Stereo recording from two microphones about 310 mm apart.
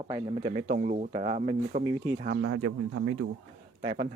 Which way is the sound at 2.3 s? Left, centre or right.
Right.